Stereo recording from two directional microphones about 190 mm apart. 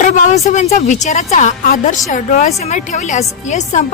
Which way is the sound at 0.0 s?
40° left (ahead or behind).